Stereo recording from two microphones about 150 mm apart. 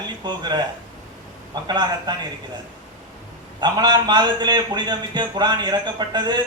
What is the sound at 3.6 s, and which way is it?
A man's voice, 30° right (ahead or behind).